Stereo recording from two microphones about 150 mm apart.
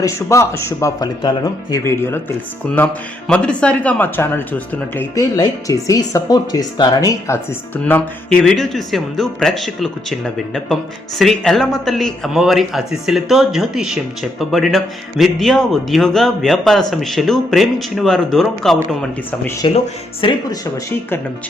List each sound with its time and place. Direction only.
0.0 s speech: 20° left (ahead or behind)
5.1 s speech: 25° left (ahead or behind)
7.9 s a man's voice: 10° left (ahead or behind)
19.6 s speech: 35° left (ahead or behind)